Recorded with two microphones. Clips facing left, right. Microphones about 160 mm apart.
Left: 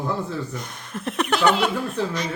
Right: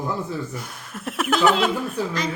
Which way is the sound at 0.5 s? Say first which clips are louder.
Left 2 dB; 5° right (ahead or behind).